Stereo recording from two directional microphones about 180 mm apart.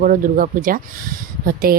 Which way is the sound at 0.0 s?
50° right (ahead or behind).